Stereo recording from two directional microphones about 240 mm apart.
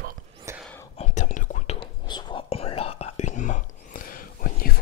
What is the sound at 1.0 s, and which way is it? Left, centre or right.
Whispering, left.